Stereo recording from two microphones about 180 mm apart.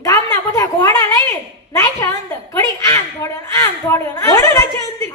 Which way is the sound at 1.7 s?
20° left (ahead or behind).